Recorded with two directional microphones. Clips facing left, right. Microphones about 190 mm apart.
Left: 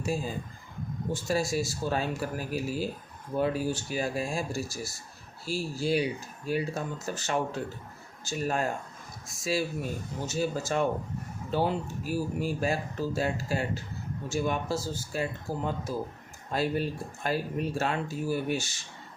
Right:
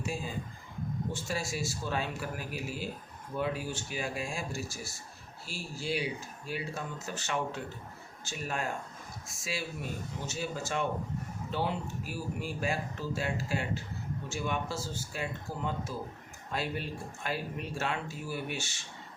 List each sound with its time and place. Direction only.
0.0 s speech: 40° left (ahead or behind)